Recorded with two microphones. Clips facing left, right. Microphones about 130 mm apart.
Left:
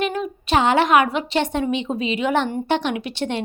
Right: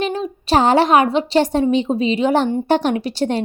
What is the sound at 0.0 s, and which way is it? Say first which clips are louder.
A woman's voice: right 2 dB; 30° right (ahead or behind).